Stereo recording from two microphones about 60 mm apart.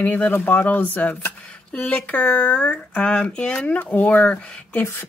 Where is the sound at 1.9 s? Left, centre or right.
Left.